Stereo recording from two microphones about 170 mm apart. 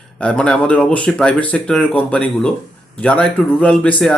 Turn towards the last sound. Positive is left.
turn(degrees=5)  # may be behind; listen again after turning